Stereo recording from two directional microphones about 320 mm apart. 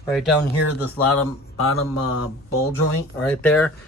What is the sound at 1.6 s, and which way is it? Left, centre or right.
Speech, left.